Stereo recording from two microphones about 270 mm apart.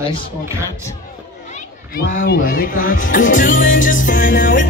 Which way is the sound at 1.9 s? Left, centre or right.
Left.